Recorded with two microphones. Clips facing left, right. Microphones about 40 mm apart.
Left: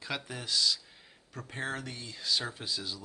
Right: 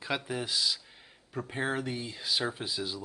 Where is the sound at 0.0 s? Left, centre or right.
Centre.